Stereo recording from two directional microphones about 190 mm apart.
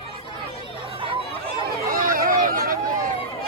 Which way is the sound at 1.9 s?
50° right (ahead or behind).